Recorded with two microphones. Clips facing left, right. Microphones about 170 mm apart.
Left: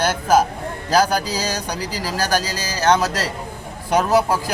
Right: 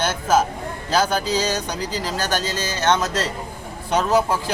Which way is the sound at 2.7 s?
35° left (ahead or behind).